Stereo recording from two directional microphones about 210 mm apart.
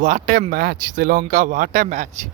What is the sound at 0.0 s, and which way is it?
Speech, 40° right (ahead or behind).